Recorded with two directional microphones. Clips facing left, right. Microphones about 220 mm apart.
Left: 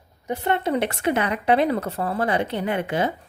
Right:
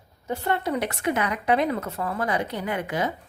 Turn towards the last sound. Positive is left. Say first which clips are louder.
# left 4 dB
turn(degrees=30)  # may be behind; listen again after turning